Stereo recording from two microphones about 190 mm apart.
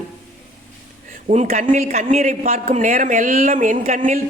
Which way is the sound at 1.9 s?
35° right (ahead or behind).